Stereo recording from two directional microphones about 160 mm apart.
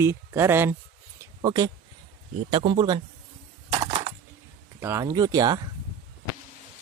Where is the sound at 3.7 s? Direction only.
35° right (ahead or behind).